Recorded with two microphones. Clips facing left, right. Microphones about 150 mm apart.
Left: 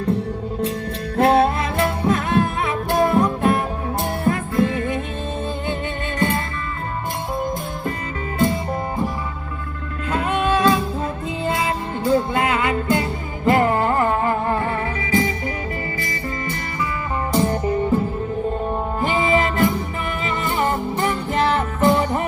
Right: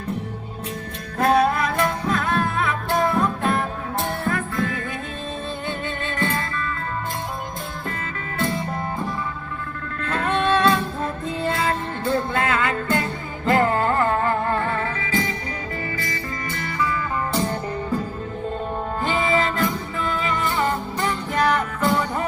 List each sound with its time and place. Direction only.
1.1 s music: 30° left (ahead or behind)
6.1 s music: 20° left (ahead or behind)
10.1 s music: 10° left (ahead or behind)
17.3 s music: 15° left (ahead or behind)
19.0 s music: 20° left (ahead or behind)